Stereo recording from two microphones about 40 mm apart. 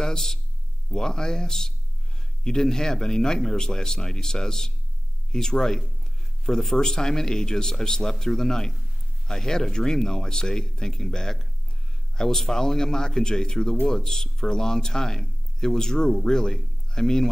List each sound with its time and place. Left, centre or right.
0.0 s speech: centre